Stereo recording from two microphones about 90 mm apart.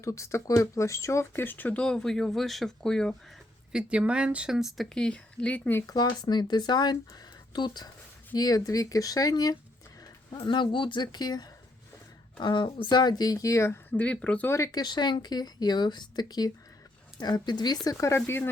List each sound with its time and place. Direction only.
0.0 s speech: 35° left (ahead or behind); by 3.2 s 5° left (ahead or behind)
3.7 s speech: 10° right (ahead or behind)
4.9 s speech: 10° left (ahead or behind)
5.8 s speech: 50° left (ahead or behind)
10.3 s speech: 60° left (ahead or behind)
12.4 s speech: 60° left (ahead or behind); by 13.7 s 35° left (ahead or behind)
13.9 s speech: 15° left (ahead or behind)
14.4 s speech: 30° left (ahead or behind)
14.7 s speech: 50° left (ahead or behind)
17.8 s speech: 35° left (ahead or behind)